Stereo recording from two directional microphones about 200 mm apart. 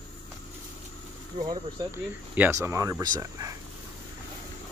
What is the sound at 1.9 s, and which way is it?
Speech, 10° right (ahead or behind).